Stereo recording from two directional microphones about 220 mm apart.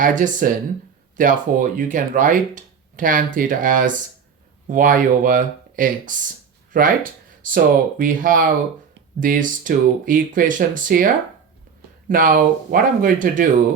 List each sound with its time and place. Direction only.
0.0 s speech: 40° right (ahead or behind)